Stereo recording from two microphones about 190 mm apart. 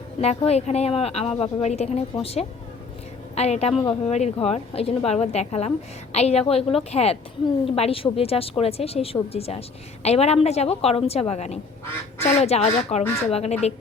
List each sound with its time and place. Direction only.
0.2 s a woman's voice: 35° left (ahead or behind)